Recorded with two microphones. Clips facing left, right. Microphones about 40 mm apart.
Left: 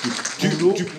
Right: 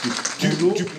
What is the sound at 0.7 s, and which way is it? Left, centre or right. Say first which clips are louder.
Speech: left 2 dB; centre.